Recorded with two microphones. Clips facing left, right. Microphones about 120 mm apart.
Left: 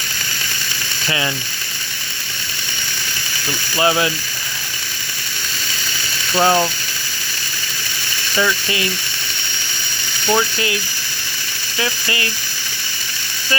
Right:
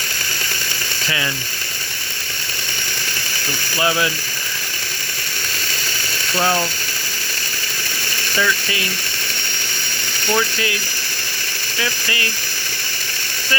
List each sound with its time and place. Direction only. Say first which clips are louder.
3.8 s speech: left 3 dB; 20° left (ahead or behind)
6.3 s speech: left 4 dB; 20° left (ahead or behind)
8.4 s speech: left 2 dB; 25° left (ahead or behind)
10.2 s speech: left 2 dB; 20° left (ahead or behind)